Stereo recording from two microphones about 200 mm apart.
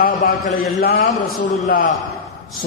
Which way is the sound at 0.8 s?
50° left (ahead or behind).